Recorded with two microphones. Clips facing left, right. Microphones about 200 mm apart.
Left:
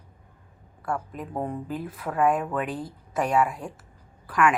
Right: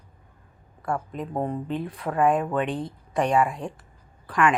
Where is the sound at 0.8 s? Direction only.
Centre (ahead or behind).